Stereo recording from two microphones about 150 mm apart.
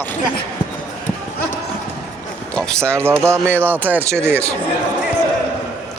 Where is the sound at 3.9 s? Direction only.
15° right (ahead or behind).